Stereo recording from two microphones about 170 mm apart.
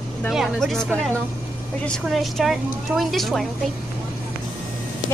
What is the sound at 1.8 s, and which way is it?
A woman's voice, centre (ahead or behind).